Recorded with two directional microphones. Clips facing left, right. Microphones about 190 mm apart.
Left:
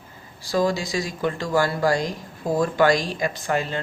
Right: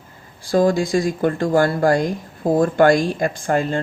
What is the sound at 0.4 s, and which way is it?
Speech, 50° right (ahead or behind).